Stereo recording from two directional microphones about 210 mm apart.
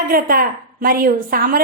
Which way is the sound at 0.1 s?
45° right (ahead or behind).